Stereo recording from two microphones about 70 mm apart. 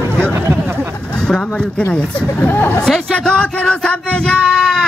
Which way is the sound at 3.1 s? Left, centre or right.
Centre.